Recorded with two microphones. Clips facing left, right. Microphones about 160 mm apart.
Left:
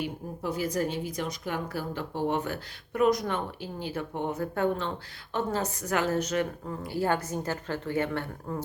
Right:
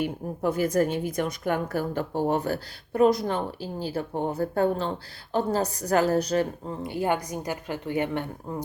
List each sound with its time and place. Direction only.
0.0 s a woman's voice: 50° right (ahead or behind); by 6.7 s 35° right (ahead or behind)
6.8 s a woman's voice: 20° right (ahead or behind)